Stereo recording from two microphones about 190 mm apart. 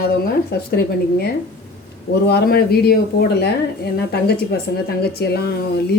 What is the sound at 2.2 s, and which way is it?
Speech, 55° left (ahead or behind).